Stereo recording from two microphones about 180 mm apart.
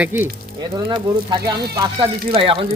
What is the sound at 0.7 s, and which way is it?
A man's voice, 25° right (ahead or behind).